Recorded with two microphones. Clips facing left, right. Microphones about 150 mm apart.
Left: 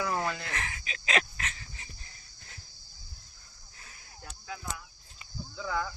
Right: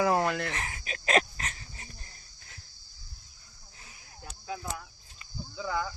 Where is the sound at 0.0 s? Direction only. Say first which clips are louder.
Right 6 dB; 60° right (ahead or behind).